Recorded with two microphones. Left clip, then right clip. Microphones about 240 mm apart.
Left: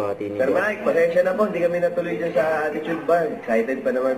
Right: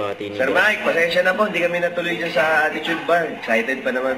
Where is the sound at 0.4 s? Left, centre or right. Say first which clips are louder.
Right 4 dB; centre.